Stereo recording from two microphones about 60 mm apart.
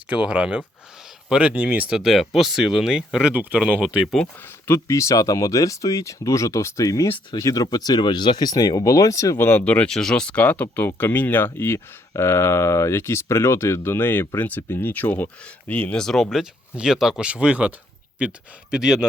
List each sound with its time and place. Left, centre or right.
0.1 s speech: centre
2.0 s speech: centre
4.4 s speech: left
6.8 s speech: left
9.4 s speech: left
9.9 s speech: centre
16.0 s speech: centre
16.3 s speech: centre